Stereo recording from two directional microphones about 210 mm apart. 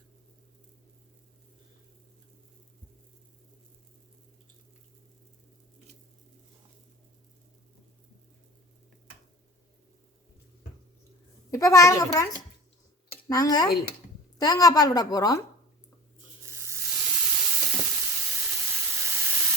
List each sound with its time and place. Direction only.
11.5 s a woman's voice: 15° left (ahead or behind)
16.5 s sizzle: 10° right (ahead or behind)